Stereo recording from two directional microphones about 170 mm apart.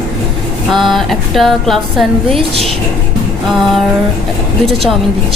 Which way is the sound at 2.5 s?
35° right (ahead or behind).